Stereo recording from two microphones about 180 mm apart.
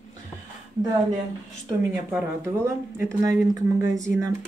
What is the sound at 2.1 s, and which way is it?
A woman's voice, 15° right (ahead or behind).